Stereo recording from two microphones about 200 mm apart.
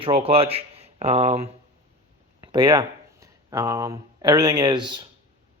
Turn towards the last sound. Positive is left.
turn(degrees=-20)  # may be behind; listen again after turning